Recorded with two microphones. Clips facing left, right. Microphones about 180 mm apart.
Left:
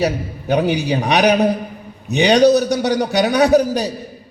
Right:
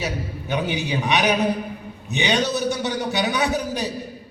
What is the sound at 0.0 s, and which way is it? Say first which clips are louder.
A man's voice: left 8 dB; 40° left (ahead or behind).